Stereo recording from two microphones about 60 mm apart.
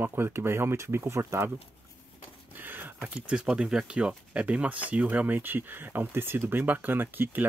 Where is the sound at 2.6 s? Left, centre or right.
Right.